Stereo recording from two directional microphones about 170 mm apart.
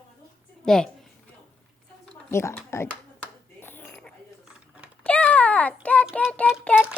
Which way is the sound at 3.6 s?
10° left (ahead or behind).